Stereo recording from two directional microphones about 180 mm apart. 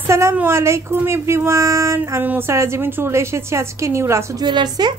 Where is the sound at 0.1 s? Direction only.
15° right (ahead or behind).